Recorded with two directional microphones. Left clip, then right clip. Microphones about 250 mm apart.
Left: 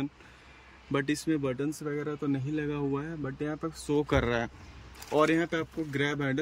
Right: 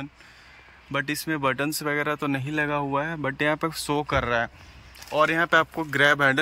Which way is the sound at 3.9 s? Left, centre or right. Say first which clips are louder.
Right 3 dB; centre.